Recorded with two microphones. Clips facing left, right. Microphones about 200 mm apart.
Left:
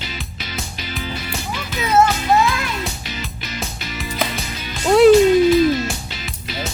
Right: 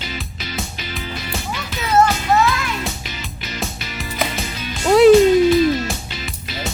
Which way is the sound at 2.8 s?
Centre (ahead or behind).